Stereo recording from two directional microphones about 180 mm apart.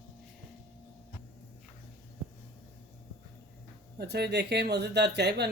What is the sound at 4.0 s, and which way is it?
Speech, 65° right (ahead or behind).